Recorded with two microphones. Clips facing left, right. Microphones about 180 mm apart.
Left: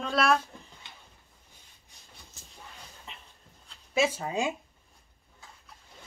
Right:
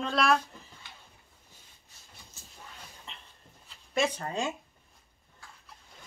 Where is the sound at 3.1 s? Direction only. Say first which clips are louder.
Left 2 dB; 5° left (ahead or behind).